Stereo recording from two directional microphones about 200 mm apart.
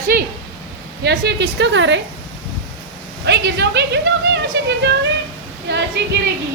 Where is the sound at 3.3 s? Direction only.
60° right (ahead or behind).